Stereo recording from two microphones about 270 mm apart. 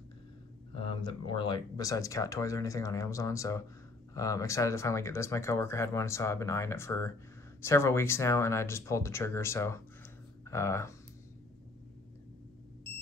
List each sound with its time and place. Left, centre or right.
0.7 s speech: centre